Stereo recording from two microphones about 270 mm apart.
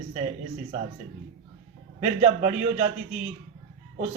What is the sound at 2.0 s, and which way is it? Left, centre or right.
Speech, right.